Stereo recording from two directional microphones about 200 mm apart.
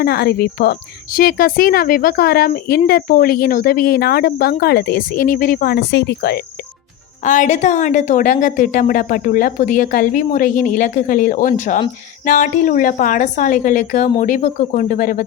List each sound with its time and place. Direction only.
0.0 s speech: 50° left (ahead or behind)
7.3 s a woman's voice: 40° left (ahead or behind)